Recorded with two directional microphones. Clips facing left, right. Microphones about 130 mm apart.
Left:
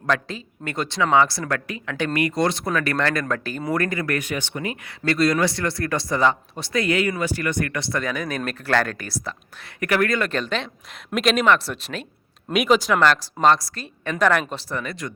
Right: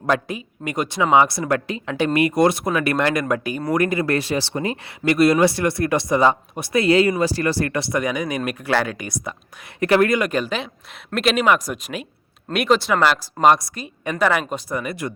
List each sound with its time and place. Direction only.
0.0 s speech: 20° right (ahead or behind)
4.0 s speech: 30° right (ahead or behind)
5.0 s speech: 20° right (ahead or behind)
9.8 s speech: 25° right (ahead or behind)